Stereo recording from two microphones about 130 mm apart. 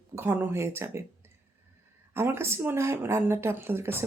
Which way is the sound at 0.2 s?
15° right (ahead or behind).